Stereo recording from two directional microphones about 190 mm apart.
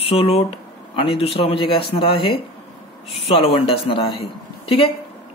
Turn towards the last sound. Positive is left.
turn(degrees=30)  # may be behind; listen again after turning